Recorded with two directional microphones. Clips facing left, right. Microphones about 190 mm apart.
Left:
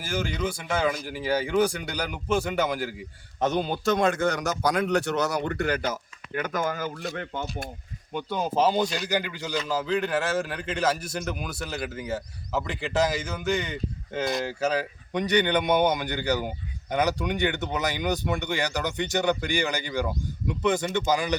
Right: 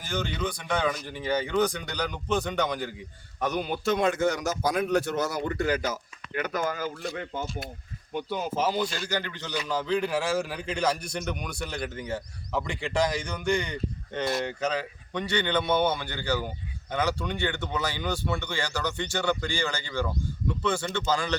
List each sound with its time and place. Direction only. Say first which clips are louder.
0.0 s speech: left 2 dB; 5° left (ahead or behind)
3.4 s a man's voice: left 4 dB; 25° left (ahead or behind)
3.8 s speech: even; 50° left (ahead or behind); by 6.0 s 70° left (ahead or behind)
8.5 s a man's voice: left 5 dB; 25° left (ahead or behind)